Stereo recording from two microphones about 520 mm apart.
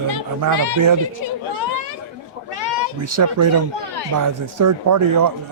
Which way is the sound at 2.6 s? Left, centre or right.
Right.